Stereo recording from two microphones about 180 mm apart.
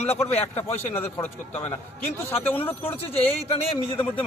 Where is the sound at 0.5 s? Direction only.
10° left (ahead or behind).